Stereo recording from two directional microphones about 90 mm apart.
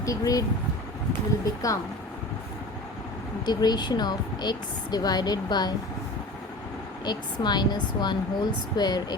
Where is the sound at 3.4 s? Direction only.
50° left (ahead or behind).